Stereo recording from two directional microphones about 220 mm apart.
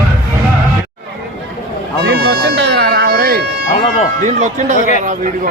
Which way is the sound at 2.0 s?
45° right (ahead or behind).